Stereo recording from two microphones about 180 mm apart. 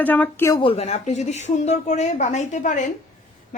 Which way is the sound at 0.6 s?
35° left (ahead or behind).